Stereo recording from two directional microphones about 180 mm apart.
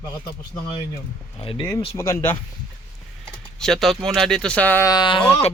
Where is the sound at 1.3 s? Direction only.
25° left (ahead or behind).